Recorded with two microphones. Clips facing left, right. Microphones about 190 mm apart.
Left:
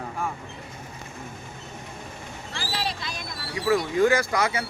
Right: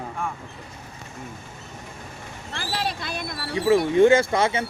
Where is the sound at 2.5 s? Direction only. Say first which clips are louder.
Right 3 dB; 55° right (ahead or behind).